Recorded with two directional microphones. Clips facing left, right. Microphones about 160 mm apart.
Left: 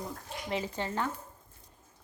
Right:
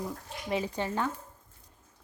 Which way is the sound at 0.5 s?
15° right (ahead or behind).